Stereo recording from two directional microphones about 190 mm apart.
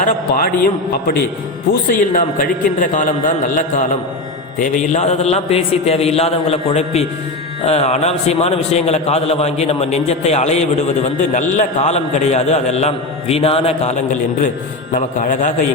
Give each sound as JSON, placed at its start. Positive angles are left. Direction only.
{"t": 0.0, "sound": "a man's voice", "side_deg": 50}
{"t": 1.9, "sound": "a man's voice", "side_deg": 45}
{"t": 4.6, "sound": "a man's voice", "side_deg": 35}